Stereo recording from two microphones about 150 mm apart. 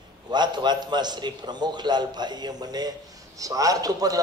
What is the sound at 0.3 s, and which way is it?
A man's voice, 30° right (ahead or behind).